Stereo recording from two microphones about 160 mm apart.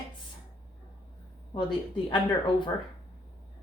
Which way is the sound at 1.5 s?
30° left (ahead or behind).